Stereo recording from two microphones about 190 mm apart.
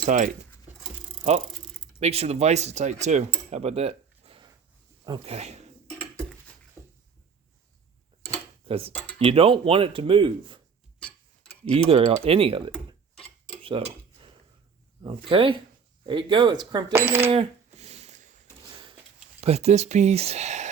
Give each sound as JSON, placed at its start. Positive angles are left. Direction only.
{"t": 0.0, "sound": "speech", "side_deg": -40}
{"t": 2.0, "sound": "speech", "side_deg": -35}
{"t": 3.5, "sound": "a sound", "side_deg": -35}
{"t": 5.0, "sound": "speech", "side_deg": -30}
{"t": 8.6, "sound": "speech", "side_deg": -30}
{"t": 11.9, "sound": "speech", "side_deg": -30}
{"t": 13.6, "sound": "cutlery", "side_deg": -30}
{"t": 15.0, "sound": "speech", "side_deg": -25}
{"t": 16.9, "sound": "speech", "side_deg": -10}
{"t": 17.3, "sound": "a sound", "side_deg": -35}
{"t": 19.4, "sound": "speech", "side_deg": -35}